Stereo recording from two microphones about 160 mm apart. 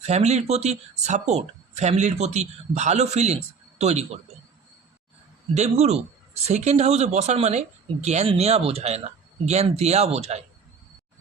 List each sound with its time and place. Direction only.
0.0 s speech: 45° right (ahead or behind)
5.5 s speech: 45° right (ahead or behind)